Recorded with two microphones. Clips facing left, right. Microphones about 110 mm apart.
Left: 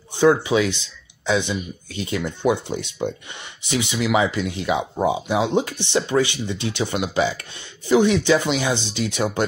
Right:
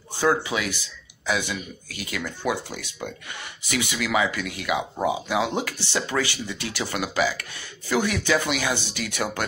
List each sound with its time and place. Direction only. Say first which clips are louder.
0.1 s speech: left 6 dB; 20° left (ahead or behind)